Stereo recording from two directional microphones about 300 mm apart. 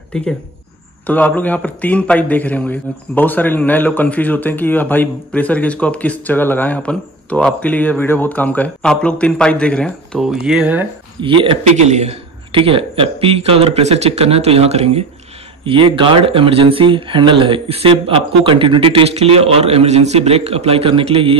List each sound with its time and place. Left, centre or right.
1.0 s a man's voice: centre
11.1 s a man's voice: centre